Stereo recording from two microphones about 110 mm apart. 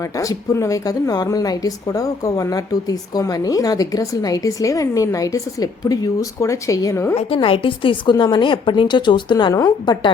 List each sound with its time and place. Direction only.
0.0 s speech: 30° left (ahead or behind)
7.3 s a woman's voice: 55° left (ahead or behind)